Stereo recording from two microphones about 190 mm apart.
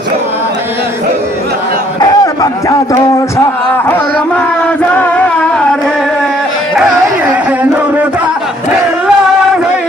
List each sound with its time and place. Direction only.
2.0 s speech: 20° left (ahead or behind)
4.9 s music: 10° left (ahead or behind)